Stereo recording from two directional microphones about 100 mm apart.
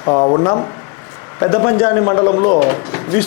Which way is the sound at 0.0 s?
35° left (ahead or behind).